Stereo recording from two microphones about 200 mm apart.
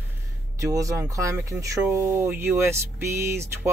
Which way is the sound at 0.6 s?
15° right (ahead or behind).